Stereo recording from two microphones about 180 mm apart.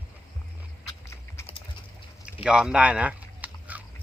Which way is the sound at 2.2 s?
5° right (ahead or behind).